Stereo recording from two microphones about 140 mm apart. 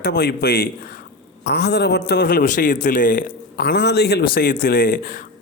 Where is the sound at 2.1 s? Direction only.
90° left; by 3.3 s 75° left (ahead or behind).